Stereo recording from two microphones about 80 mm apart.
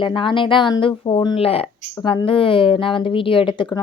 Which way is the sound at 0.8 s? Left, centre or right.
Left.